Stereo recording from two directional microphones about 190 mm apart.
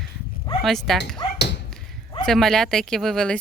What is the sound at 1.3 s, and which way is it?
Tap, 60° left (ahead or behind).